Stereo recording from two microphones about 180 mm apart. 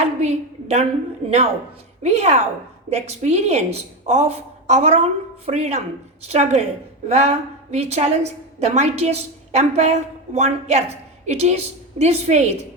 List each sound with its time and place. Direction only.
0.0 s a woman's voice: 35° right (ahead or behind)